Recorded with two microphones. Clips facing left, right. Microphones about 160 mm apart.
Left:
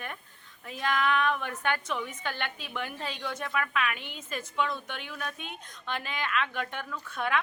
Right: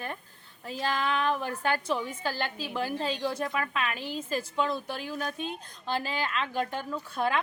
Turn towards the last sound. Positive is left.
turn(degrees=-35)  # may be behind; listen again after turning